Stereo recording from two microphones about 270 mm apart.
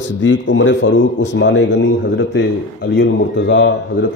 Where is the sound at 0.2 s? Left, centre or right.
Left.